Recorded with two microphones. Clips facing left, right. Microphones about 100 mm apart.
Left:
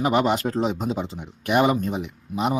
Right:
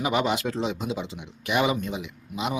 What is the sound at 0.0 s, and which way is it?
A man's voice, 40° left (ahead or behind).